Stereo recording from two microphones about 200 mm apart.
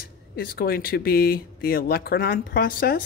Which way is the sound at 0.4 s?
50° left (ahead or behind).